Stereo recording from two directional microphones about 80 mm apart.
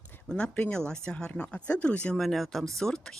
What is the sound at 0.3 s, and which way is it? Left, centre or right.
Speech, centre.